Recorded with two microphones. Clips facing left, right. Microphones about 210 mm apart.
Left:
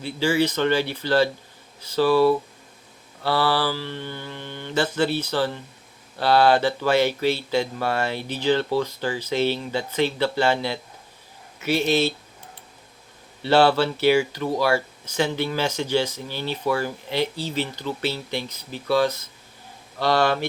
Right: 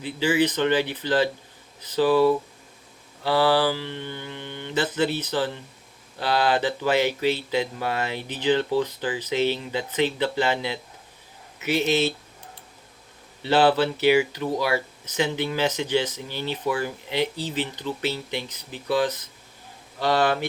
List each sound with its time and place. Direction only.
0.0 s speech: 15° right (ahead or behind)
13.4 s speech: 15° right (ahead or behind)